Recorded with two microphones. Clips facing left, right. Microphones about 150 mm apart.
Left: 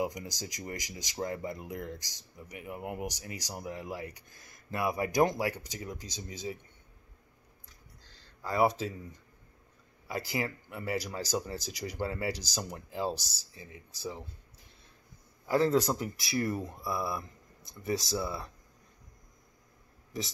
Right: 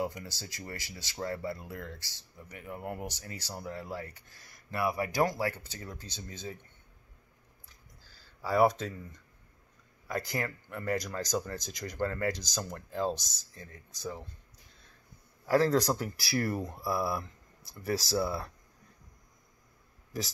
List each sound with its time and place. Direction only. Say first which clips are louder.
0.0 s speech: left 1 dB; 15° left (ahead or behind)
8.0 s a sound: right 2 dB; 5° right (ahead or behind)
10.0 s speech: even; 5° left (ahead or behind)
15.5 s speech: right 1 dB; centre (ahead or behind)